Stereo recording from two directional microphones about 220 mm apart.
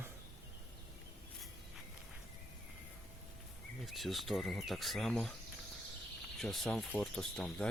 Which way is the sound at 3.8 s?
Centre (ahead or behind).